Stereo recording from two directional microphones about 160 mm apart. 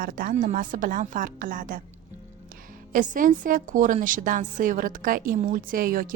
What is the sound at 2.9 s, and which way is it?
A woman's voice, 60° right (ahead or behind).